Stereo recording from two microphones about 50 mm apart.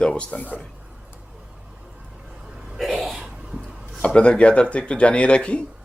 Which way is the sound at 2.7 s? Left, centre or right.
Centre.